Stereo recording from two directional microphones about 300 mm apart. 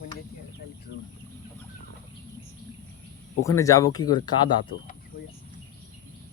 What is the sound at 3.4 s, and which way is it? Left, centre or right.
Speech, centre.